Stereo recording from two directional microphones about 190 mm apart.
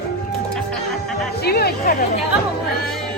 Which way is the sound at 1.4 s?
55° left (ahead or behind).